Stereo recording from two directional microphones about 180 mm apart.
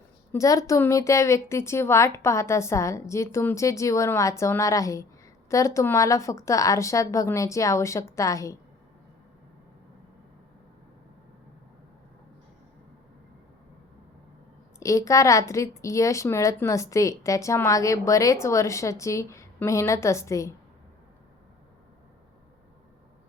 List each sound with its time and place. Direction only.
0.3 s a woman's voice: 20° left (ahead or behind)
14.8 s a woman's voice: 15° left (ahead or behind)